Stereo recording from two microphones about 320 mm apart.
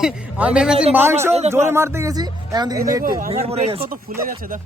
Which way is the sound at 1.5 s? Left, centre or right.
Centre.